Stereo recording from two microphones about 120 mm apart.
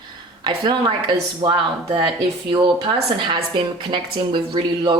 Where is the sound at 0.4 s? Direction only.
40° right (ahead or behind).